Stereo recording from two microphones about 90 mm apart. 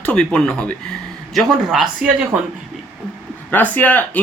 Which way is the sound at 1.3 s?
5° right (ahead or behind).